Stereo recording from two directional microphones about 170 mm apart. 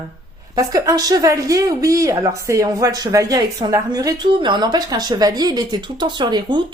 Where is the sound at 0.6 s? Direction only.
20° right (ahead or behind).